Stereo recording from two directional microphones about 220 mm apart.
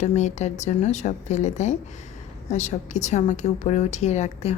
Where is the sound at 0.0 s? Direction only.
30° left (ahead or behind).